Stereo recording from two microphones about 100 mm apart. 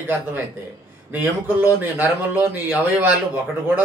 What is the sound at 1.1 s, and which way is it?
A man's voice, 20° right (ahead or behind).